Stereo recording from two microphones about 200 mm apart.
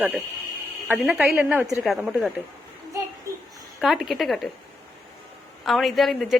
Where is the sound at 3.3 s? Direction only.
15° right (ahead or behind).